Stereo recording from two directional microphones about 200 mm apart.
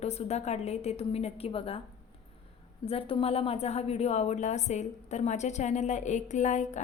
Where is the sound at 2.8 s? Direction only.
30° left (ahead or behind).